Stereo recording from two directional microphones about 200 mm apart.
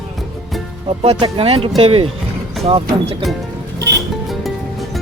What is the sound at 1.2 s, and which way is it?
Speech, 30° right (ahead or behind).